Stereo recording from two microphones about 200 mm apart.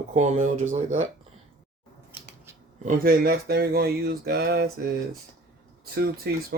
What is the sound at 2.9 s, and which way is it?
Speech, 45° right (ahead or behind).